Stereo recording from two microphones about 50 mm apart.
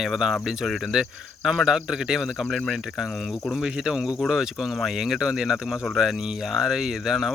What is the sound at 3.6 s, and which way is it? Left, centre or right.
Speech, centre.